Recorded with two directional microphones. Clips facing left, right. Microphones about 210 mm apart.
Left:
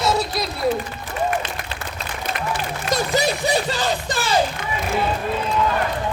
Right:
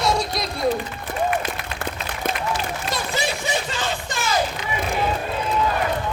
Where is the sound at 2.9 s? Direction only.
40° left (ahead or behind).